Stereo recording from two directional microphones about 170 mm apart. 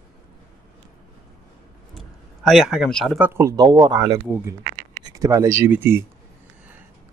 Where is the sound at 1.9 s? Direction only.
Centre (ahead or behind).